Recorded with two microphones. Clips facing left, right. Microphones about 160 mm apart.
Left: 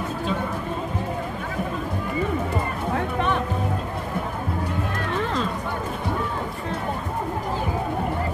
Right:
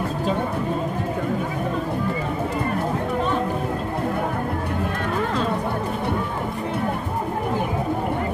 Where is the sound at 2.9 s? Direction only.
70° left (ahead or behind).